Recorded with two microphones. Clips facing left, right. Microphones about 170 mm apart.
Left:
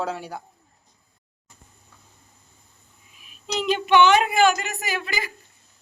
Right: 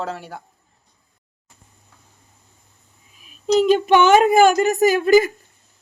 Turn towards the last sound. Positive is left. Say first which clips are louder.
# right 16 dB
turn(degrees=-45)  # may be behind; listen again after turning